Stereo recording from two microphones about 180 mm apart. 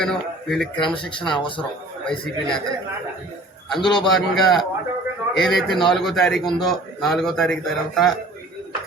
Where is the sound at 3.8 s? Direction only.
25° left (ahead or behind).